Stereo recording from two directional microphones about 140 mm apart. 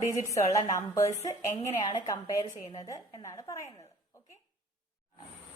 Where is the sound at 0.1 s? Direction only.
20° left (ahead or behind).